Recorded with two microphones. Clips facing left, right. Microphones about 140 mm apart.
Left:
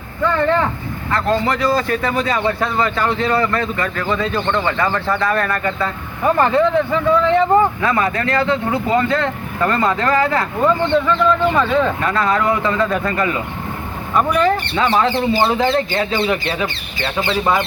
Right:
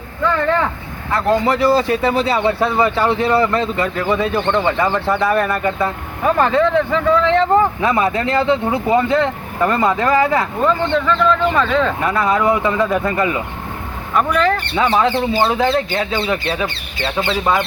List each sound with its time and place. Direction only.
1.3 s speech: 5° right (ahead or behind)
6.2 s speech: centre (ahead or behind)
7.8 s speech: 20° right (ahead or behind); by 10.4 s 5° right (ahead or behind)
10.6 s speech: 10° left (ahead or behind)
12.0 s speech: 5° right (ahead or behind)
14.3 s speech: 10° left (ahead or behind)
14.8 s speech: centre (ahead or behind)